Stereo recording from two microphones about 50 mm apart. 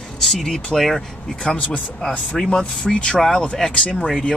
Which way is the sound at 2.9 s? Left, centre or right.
Centre.